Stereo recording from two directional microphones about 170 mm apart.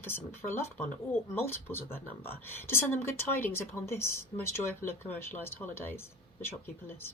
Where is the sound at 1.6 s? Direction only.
10° left (ahead or behind).